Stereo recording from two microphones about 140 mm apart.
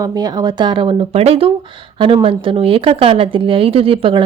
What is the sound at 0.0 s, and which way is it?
Speech, 25° right (ahead or behind).